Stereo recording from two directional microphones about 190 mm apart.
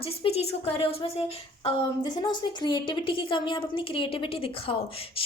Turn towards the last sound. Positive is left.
turn(degrees=30)  # may be behind; listen again after turning